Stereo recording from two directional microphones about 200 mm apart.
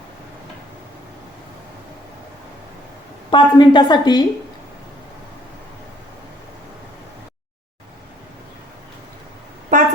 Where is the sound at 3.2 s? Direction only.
25° left (ahead or behind).